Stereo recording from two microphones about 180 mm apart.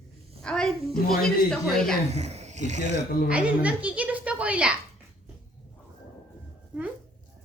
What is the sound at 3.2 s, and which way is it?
A woman's voice, 5° right (ahead or behind).